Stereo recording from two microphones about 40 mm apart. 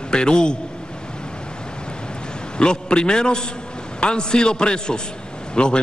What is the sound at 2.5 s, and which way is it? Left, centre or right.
A man's voice, left.